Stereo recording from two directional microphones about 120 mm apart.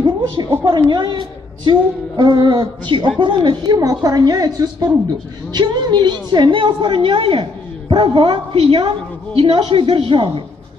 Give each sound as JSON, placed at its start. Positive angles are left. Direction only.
{"t": 0.7, "sound": "a woman's voice", "side_deg": -40}